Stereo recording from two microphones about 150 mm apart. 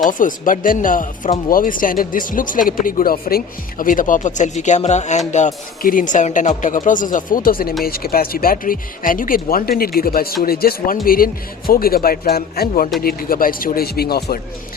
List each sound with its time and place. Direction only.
0.1 s speech: 60° left (ahead or behind)
7.9 s speech: 85° left